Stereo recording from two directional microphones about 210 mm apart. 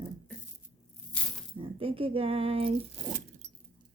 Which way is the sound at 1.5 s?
25° right (ahead or behind).